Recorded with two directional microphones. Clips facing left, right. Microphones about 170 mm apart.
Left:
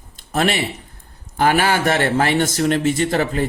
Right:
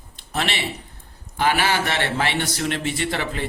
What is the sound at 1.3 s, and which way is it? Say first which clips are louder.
Speech: left 4 dB; 45° left (ahead or behind).